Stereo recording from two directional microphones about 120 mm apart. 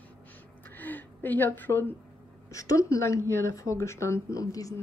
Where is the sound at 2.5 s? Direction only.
30° left (ahead or behind).